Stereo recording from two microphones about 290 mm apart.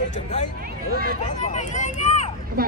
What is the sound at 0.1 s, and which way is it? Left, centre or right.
Speech, left.